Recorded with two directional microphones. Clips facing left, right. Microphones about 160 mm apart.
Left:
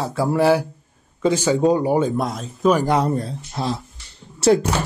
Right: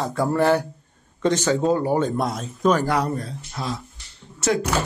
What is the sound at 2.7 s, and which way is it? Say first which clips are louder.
Speech: left 3 dB; 20° left (ahead or behind).